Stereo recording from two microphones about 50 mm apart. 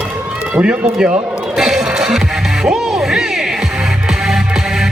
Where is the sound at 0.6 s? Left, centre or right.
Centre.